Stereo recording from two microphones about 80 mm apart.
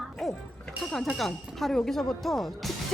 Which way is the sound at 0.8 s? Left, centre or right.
Centre.